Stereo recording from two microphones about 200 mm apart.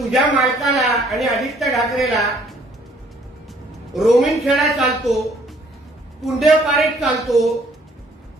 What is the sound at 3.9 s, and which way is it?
A man's voice, centre (ahead or behind).